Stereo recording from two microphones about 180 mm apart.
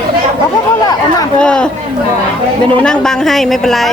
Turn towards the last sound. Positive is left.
turn(degrees=0)  # may be behind; listen again after turning